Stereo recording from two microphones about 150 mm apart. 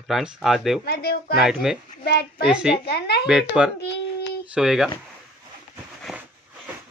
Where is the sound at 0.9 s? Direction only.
90° left.